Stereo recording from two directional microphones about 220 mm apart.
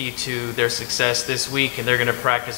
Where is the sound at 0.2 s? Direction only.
10° left (ahead or behind).